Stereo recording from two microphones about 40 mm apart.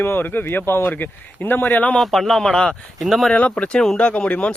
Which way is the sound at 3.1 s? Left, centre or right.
Centre.